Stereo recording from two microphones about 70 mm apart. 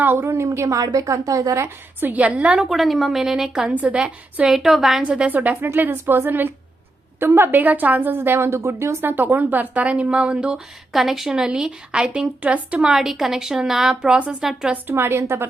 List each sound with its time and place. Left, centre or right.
0.0 s a woman's voice: right
0.8 s speech: right
1.6 s a woman's voice: right
2.6 s a woman's voice: centre
4.5 s a woman's voice: centre
5.0 s a woman's voice: centre; by 9.0 s right
9.0 s a woman's voice: right
12.9 s speech: centre
14.8 s a woman's voice: right